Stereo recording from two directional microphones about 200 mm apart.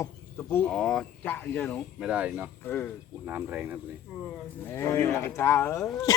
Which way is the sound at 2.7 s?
10° left (ahead or behind).